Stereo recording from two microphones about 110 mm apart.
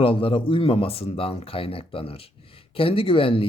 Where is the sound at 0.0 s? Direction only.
55° left (ahead or behind).